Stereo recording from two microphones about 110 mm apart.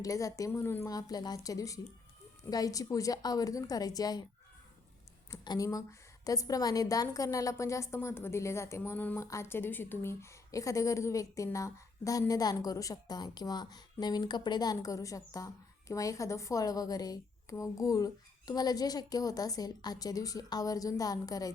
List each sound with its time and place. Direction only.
0.0 s a woman's voice: 30° left (ahead or behind)
0.9 s a woman's voice: 35° left (ahead or behind)
5.3 s a woman's voice: 35° left (ahead or behind)